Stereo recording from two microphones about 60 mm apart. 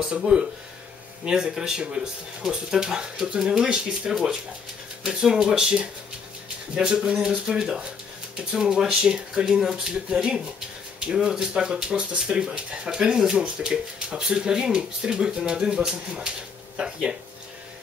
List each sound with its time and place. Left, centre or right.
0.0 s speech: centre